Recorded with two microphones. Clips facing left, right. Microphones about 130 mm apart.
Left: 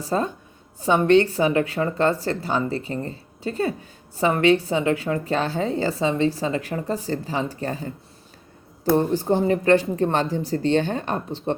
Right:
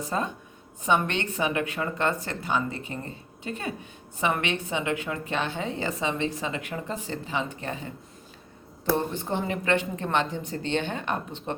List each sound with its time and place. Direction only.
0.0 s a woman's voice: 35° left (ahead or behind)
9.0 s a woman's voice: 35° left (ahead or behind)